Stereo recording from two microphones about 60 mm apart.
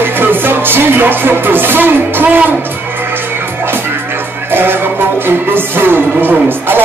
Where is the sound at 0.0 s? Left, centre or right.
Right.